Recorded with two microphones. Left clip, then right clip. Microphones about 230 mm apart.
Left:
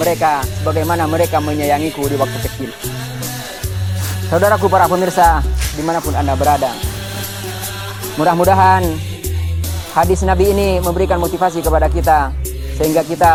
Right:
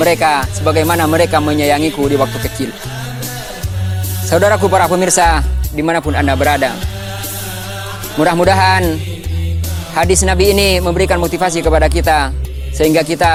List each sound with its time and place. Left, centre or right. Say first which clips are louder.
0.0 s speech: right 3 dB; right
4.3 s speech: right 1 dB; right
5.8 s speech: right 3 dB; right
8.2 s speech: even; right
9.9 s speech: right 1 dB; right